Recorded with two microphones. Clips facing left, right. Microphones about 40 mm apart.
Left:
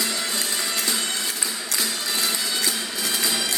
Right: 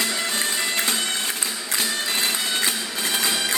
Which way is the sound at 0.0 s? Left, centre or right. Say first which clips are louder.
Right 2 dB; right.